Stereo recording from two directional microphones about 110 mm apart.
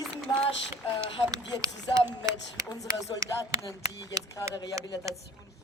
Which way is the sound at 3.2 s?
35° right (ahead or behind).